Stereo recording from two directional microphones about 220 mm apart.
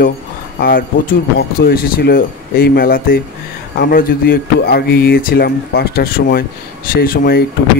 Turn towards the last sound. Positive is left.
turn(degrees=45)  # may be behind; listen again after turning